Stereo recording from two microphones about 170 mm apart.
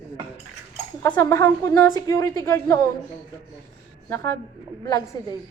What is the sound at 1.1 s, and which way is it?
A woman's voice, 15° left (ahead or behind).